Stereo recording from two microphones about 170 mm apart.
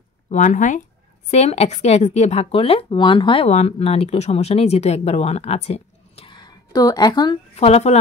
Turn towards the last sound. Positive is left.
turn(degrees=40)  # may be behind; listen again after turning